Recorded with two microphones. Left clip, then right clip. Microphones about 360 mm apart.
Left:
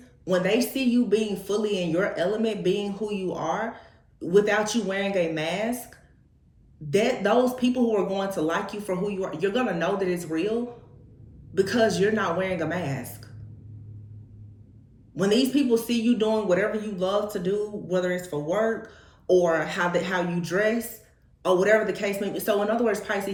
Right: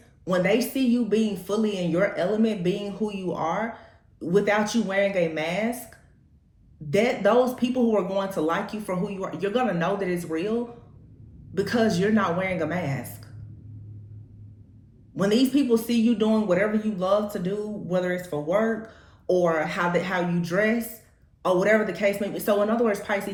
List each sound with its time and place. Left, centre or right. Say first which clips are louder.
0.3 s a man's voice: right 1 dB; centre
15.1 s a man's voice: even; centre